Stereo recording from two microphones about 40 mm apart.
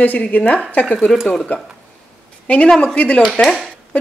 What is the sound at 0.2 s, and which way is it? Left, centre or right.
Speech, left.